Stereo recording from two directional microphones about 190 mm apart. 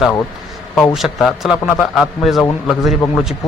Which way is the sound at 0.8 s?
Centre (ahead or behind).